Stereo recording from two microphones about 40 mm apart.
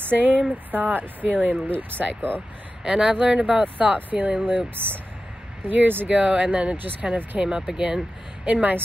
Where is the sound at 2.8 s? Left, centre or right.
Right.